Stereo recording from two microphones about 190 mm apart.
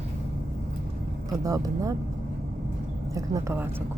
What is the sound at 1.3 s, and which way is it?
Speech, 20° right (ahead or behind).